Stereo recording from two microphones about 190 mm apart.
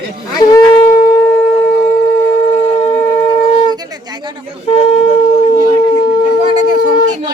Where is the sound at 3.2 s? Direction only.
40° left (ahead or behind).